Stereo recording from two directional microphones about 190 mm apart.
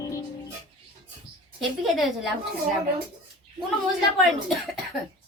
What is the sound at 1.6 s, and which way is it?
Speech, centre (ahead or behind).